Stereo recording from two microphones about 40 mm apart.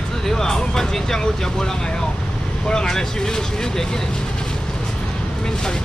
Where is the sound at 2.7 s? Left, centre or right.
Centre.